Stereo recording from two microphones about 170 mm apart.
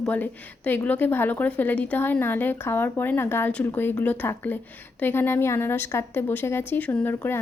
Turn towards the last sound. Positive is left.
turn(degrees=10)  # may be behind; listen again after turning